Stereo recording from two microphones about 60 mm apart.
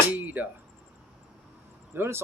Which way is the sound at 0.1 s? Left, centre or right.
Right.